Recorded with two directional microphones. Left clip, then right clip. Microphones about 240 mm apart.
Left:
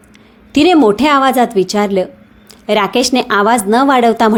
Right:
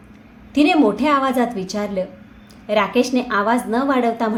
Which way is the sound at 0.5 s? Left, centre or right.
Left.